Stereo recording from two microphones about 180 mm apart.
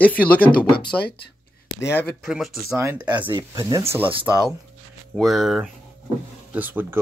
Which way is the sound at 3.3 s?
20° right (ahead or behind).